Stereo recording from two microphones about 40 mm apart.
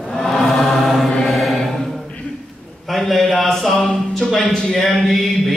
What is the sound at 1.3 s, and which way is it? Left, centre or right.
Mantra, centre.